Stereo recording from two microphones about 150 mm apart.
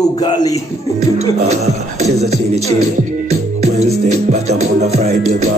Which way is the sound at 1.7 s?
45° right (ahead or behind).